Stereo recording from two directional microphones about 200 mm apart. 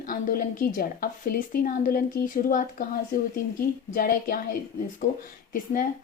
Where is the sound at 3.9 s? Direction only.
45° left (ahead or behind).